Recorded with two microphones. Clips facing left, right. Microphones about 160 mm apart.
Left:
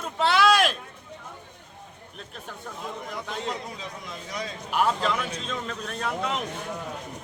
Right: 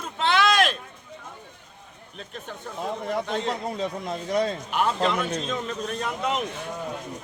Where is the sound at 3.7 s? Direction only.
45° right (ahead or behind).